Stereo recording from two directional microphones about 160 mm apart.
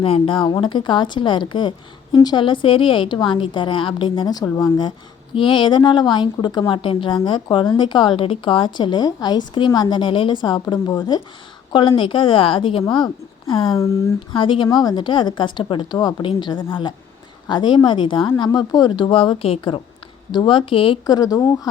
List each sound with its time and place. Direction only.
0.0 s a woman's voice: 35° left (ahead or behind)
4.4 s speech: 15° left (ahead or behind)
4.8 s a woman's voice: 30° left (ahead or behind)
13.7 s a woman's voice: 20° left (ahead or behind)
14.3 s a woman's voice: 30° left (ahead or behind)